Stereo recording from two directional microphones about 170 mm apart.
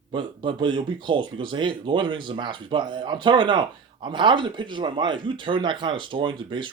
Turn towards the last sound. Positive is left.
turn(degrees=-30)  # may be behind; listen again after turning